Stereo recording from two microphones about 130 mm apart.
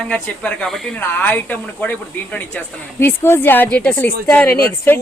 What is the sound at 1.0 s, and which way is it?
Speech, 15° left (ahead or behind).